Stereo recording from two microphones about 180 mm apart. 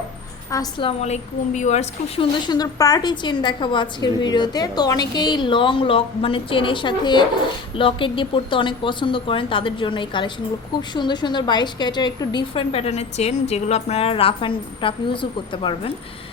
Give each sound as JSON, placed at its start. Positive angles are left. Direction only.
{"t": 0.5, "sound": "a woman's voice", "side_deg": 25}